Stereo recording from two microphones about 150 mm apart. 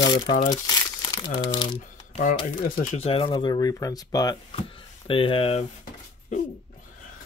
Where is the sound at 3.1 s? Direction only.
35° left (ahead or behind).